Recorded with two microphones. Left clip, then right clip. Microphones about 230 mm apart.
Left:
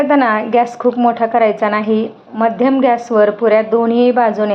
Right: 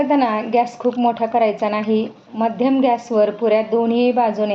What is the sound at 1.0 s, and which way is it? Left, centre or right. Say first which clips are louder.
A woman's voice: left 4 dB; left.